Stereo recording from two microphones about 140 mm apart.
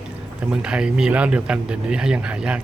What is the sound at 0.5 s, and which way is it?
Speech, 5° right (ahead or behind).